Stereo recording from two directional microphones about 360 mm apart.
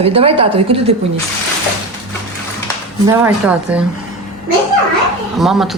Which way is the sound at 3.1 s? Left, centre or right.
Centre.